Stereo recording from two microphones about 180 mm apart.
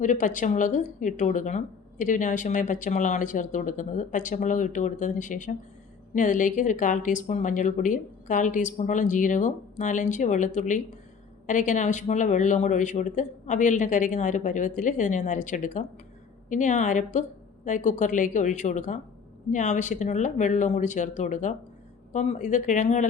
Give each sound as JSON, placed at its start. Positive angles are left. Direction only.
{"t": 0.0, "sound": "speech", "side_deg": 45}